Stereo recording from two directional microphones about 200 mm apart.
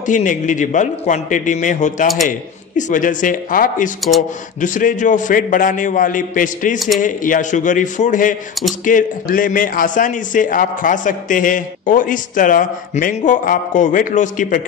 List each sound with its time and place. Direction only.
0.0 s a man's voice: 40° left (ahead or behind)